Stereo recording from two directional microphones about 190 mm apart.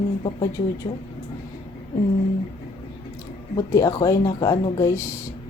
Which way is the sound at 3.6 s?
20° left (ahead or behind).